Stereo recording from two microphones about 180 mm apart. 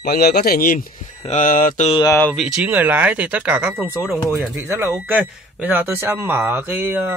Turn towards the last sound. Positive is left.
turn(degrees=-10)  # may be behind; listen again after turning